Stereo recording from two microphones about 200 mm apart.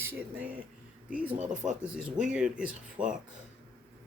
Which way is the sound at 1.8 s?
5° right (ahead or behind).